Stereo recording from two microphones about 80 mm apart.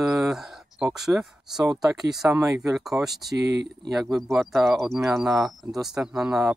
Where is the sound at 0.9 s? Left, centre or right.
Centre.